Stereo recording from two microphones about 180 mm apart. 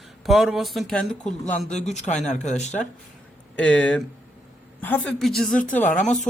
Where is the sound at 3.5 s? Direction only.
5° left (ahead or behind).